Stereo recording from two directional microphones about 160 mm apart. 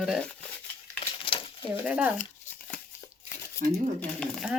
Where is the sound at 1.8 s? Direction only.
10° right (ahead or behind).